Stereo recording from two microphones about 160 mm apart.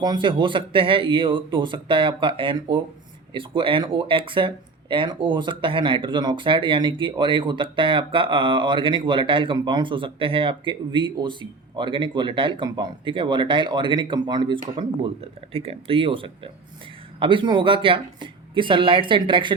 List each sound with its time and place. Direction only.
0.0 s speech: 30° right (ahead or behind)